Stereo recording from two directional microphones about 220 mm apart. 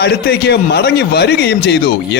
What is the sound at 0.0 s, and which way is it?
A man's voice, 50° left (ahead or behind).